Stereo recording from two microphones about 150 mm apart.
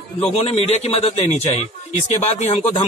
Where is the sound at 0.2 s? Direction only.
45° left (ahead or behind).